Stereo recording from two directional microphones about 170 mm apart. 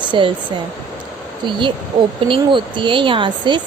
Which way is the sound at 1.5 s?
30° right (ahead or behind).